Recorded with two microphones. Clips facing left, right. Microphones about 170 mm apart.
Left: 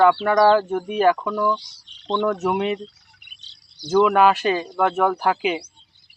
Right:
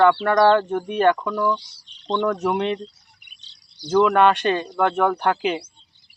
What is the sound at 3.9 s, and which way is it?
Speech, 5° left (ahead or behind).